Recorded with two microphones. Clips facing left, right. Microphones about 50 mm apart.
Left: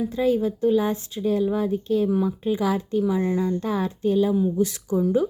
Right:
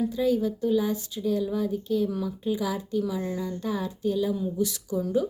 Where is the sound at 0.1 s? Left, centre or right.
Left.